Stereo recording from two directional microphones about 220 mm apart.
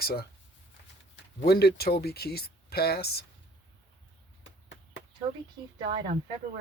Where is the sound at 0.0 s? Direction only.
45° left (ahead or behind).